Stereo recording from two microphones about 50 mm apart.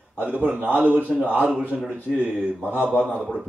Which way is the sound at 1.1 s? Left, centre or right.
Centre.